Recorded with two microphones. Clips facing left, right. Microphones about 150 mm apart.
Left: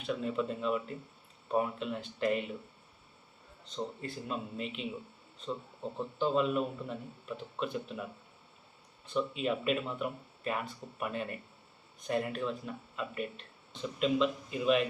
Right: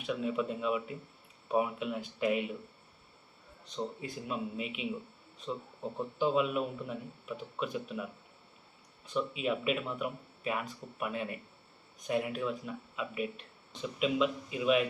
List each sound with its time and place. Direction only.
0.0 s speech: 5° right (ahead or behind)
3.8 s speech: 5° right (ahead or behind)
6.0 s speech: 10° right (ahead or behind)
9.1 s speech: 5° right (ahead or behind)